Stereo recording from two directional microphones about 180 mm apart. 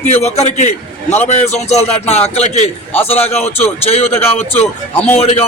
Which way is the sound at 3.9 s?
35° left (ahead or behind).